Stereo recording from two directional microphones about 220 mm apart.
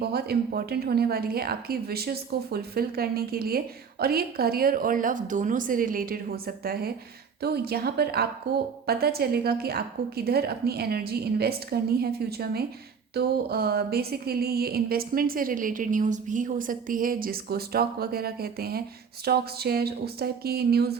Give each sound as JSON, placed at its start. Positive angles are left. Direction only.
{"t": 0.0, "sound": "a woman's voice", "side_deg": -45}